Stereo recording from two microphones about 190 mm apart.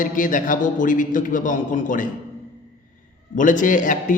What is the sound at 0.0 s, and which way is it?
A man's voice, 45° left (ahead or behind).